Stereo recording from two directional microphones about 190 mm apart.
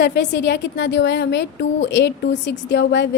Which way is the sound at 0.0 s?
65° left (ahead or behind).